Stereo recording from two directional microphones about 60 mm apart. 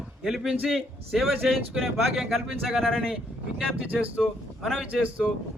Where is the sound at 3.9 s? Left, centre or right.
Right.